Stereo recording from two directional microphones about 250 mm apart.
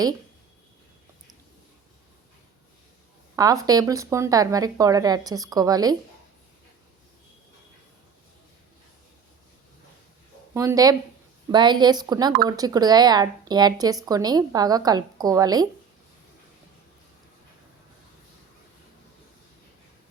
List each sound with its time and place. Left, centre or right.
3.3 s a woman's voice: centre
10.5 s a woman's voice: centre